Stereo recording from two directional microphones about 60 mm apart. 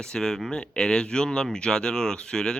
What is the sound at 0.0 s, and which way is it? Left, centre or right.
Speech, centre.